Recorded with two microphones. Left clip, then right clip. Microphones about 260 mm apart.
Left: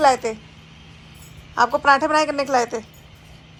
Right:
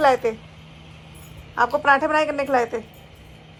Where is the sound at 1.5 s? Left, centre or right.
Centre.